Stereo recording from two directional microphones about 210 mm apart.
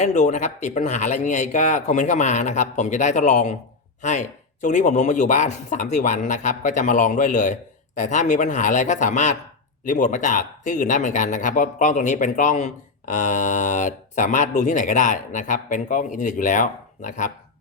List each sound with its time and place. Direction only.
0.0 s speech: 35° left (ahead or behind)